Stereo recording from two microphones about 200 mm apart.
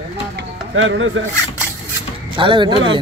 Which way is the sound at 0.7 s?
75° right (ahead or behind).